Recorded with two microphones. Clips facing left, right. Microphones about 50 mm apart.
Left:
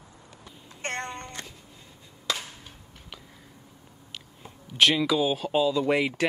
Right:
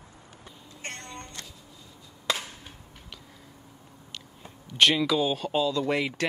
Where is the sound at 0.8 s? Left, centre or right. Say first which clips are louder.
Left 8 dB; left.